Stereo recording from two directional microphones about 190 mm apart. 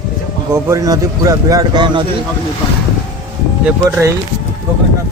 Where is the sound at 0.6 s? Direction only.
15° right (ahead or behind).